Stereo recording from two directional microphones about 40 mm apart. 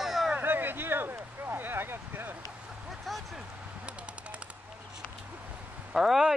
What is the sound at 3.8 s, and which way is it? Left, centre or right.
Machine gun, right.